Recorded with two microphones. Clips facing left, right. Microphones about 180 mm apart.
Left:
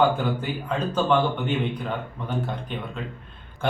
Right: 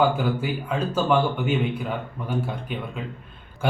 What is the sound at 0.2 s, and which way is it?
Speech, 10° right (ahead or behind).